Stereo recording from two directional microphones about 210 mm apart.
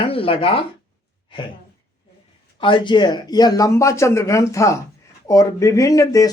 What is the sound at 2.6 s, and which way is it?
Speech, 25° left (ahead or behind).